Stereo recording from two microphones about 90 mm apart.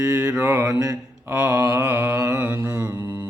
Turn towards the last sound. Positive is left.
turn(degrees=-30)  # may be behind; listen again after turning